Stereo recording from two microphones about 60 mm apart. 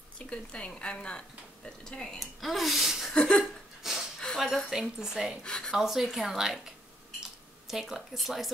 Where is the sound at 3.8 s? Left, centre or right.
Centre.